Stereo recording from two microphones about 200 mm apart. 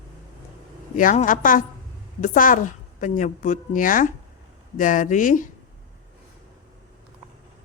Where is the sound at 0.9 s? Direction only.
40° left (ahead or behind).